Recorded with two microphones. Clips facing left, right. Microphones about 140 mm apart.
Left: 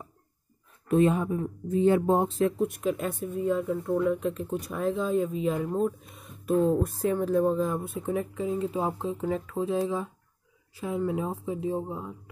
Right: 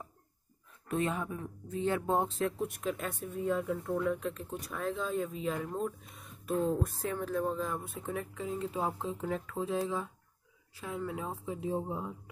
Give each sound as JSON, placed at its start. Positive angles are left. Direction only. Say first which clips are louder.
{"t": 0.8, "sound": "speech", "louder": "left 10 dB", "side_deg": 20}
{"t": 2.2, "sound": "speech", "louder": "left 8 dB", "side_deg": 5}
{"t": 11.4, "sound": "speech", "louder": "left 5 dB", "side_deg": 5}